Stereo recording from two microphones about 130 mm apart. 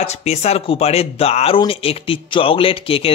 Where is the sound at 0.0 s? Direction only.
55° left (ahead or behind).